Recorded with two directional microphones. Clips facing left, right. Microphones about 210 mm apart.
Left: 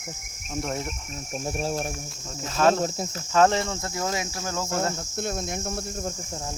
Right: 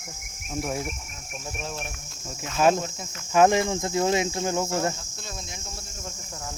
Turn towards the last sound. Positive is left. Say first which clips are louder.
# left 10 dB
turn(degrees=55)  # may be behind; listen again after turning